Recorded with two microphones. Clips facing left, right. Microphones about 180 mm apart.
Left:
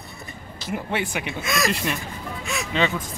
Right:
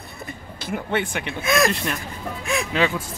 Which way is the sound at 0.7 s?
5° left (ahead or behind).